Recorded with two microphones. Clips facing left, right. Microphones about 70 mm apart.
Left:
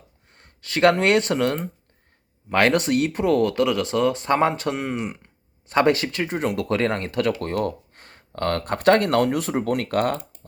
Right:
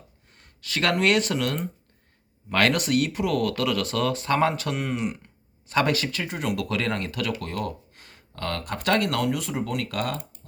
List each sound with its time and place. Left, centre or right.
0.3 s speech: left